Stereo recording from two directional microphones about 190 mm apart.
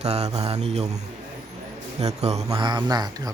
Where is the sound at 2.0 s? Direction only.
35° right (ahead or behind).